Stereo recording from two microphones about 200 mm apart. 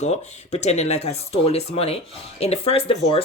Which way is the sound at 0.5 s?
35° left (ahead or behind).